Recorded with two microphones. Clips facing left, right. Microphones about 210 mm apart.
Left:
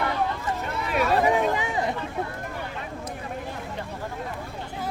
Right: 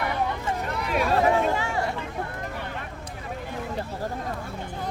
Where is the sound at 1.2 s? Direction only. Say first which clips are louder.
Even; 15° left (ahead or behind).